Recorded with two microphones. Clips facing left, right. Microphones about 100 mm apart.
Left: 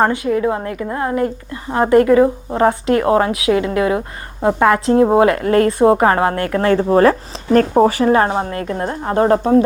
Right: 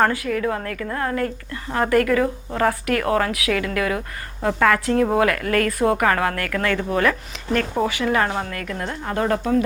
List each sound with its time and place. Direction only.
0.0 s a woman's voice: 25° left (ahead or behind)